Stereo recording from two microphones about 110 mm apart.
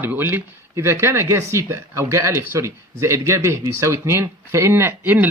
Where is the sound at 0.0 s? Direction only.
20° right (ahead or behind).